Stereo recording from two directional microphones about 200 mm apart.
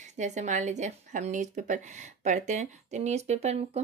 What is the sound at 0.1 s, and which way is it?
Speech, 35° right (ahead or behind).